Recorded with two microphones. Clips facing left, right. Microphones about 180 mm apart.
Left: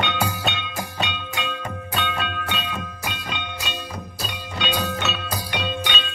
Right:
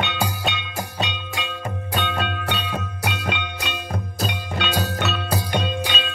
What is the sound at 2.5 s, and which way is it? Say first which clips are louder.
Music: right 2 dB; 70° right (ahead or behind).